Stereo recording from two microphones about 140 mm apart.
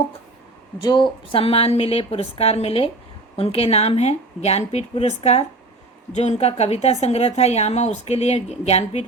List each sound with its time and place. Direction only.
0.8 s a woman's voice: 35° left (ahead or behind); by 9.0 s 50° left (ahead or behind)